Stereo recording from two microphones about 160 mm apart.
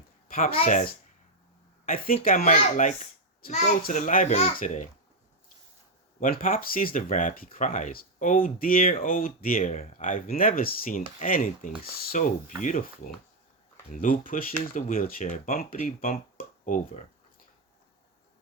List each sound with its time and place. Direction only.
0.3 s speech: 60° left (ahead or behind)
2.2 s a child's voice: 55° left (ahead or behind)
3.8 s a child's voice: 55° left (ahead or behind)
6.1 s speech: 60° left (ahead or behind)
13.9 s speech: 60° left (ahead or behind)